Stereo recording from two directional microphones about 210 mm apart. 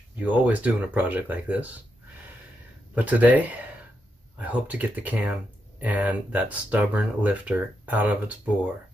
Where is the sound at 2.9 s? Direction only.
5° right (ahead or behind).